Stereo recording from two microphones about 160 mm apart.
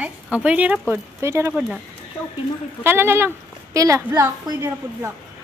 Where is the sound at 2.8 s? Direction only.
15° right (ahead or behind).